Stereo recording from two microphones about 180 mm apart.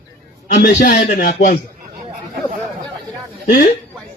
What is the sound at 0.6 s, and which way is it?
Speech, 65° left (ahead or behind).